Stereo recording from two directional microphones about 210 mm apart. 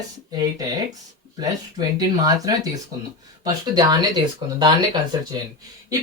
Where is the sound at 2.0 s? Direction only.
15° right (ahead or behind).